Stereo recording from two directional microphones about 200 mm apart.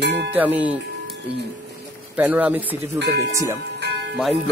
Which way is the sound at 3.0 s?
60° right (ahead or behind).